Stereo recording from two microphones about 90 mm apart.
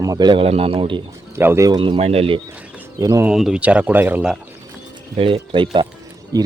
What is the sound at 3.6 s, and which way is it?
Speech, 15° right (ahead or behind).